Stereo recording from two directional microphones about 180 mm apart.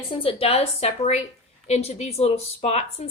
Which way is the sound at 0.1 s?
30° left (ahead or behind).